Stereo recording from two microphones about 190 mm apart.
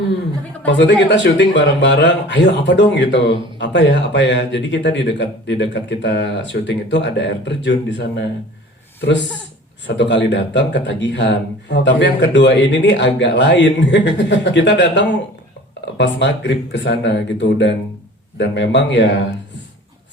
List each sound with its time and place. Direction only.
0.6 s speech: 70° left (ahead or behind)
9.8 s speech: 70° left (ahead or behind)